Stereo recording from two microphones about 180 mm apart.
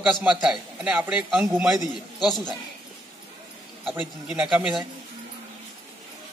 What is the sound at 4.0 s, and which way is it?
Speech, 5° right (ahead or behind).